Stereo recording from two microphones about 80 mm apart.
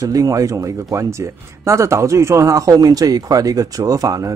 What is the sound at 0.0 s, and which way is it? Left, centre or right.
Speech, right.